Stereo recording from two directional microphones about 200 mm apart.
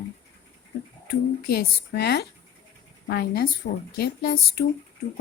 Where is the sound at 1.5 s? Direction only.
50° left (ahead or behind).